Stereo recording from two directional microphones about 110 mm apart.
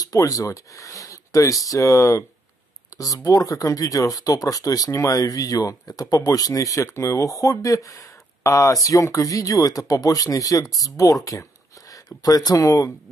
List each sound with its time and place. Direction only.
0.0 s speech: 30° left (ahead or behind)
2.9 s a sound: 30° left (ahead or behind)
3.3 s speech: 35° left (ahead or behind)